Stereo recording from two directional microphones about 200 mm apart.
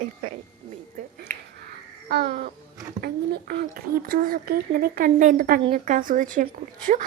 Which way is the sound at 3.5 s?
50° right (ahead or behind).